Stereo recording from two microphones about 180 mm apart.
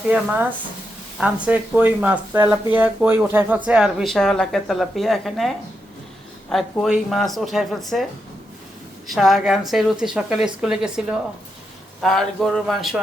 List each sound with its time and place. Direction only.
1.2 s a woman's voice: 5° right (ahead or behind)
6.5 s a woman's voice: centre (ahead or behind)
9.0 s a woman's voice: centre (ahead or behind)